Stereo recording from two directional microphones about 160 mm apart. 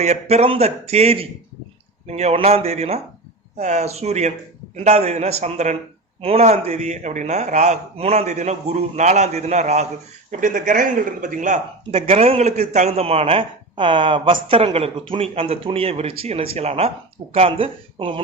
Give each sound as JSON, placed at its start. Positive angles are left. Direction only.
{"t": 0.0, "sound": "a man's voice", "side_deg": -40}
{"t": 10.4, "sound": "speech", "side_deg": -55}
{"t": 11.9, "sound": "speech", "side_deg": -40}